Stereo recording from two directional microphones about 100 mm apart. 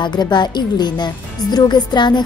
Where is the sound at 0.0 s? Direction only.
50° left (ahead or behind).